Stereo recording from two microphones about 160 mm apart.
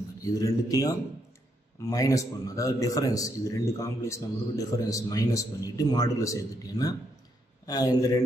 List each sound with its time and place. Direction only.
0.2 s a man's voice: 20° left (ahead or behind)